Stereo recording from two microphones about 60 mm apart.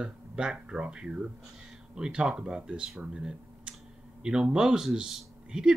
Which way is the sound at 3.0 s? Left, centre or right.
Centre.